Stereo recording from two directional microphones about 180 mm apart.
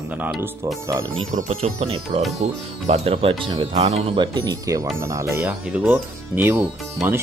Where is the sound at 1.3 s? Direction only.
45° right (ahead or behind).